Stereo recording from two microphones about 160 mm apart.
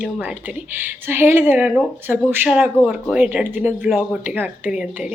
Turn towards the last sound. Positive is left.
turn(degrees=-5)  # may be behind; listen again after turning